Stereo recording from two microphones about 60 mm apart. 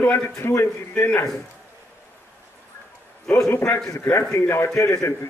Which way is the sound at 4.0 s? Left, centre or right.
Left.